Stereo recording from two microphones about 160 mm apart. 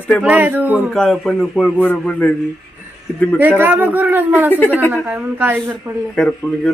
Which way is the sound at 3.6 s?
10° right (ahead or behind).